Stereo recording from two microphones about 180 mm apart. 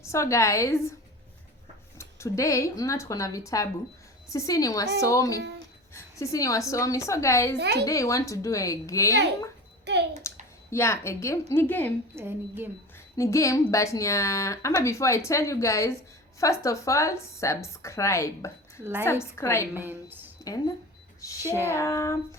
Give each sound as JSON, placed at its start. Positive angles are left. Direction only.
{"t": 0.0, "sound": "a woman's voice", "side_deg": 15}
{"t": 2.0, "sound": "a woman's voice", "side_deg": 15}
{"t": 5.4, "sound": "speech", "side_deg": -75}
{"t": 5.9, "sound": "a woman's voice", "side_deg": 15}
{"t": 7.6, "sound": "a woman's voice", "side_deg": -65}
{"t": 7.9, "sound": "a woman's voice", "side_deg": 15}
{"t": 9.9, "sound": "a child's voice", "side_deg": -75}
{"t": 10.3, "sound": "a sound", "side_deg": 15}
{"t": 10.7, "sound": "a woman's voice", "side_deg": 15}
{"t": 12.1, "sound": "a woman's voice", "side_deg": -10}
{"t": 13.1, "sound": "a woman's voice", "side_deg": 15}
{"t": 19.7, "sound": "a woman's voice", "side_deg": -10}
{"t": 21.7, "sound": "a woman's voice", "side_deg": 15}